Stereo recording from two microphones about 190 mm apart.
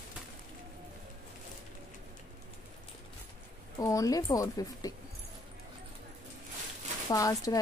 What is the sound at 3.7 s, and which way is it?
Speech, 20° left (ahead or behind).